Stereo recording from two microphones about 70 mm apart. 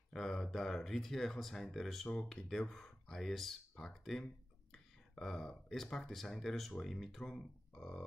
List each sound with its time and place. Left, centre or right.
0.1 s speech: centre